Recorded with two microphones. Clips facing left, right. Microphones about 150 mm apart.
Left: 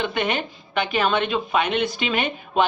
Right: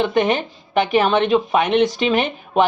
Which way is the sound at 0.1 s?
40° right (ahead or behind).